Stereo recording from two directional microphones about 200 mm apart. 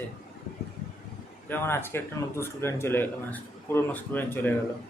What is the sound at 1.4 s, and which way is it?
Speech, 10° left (ahead or behind).